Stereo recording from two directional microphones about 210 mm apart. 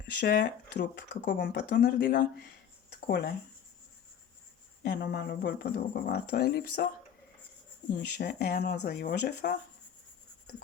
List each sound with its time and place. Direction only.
0.2 s speech: 45° left (ahead or behind)
4.8 s speech: 50° left (ahead or behind)
7.9 s speech: 50° left (ahead or behind)